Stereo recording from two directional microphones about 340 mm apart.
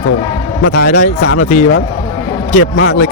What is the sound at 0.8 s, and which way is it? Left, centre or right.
Speech, left.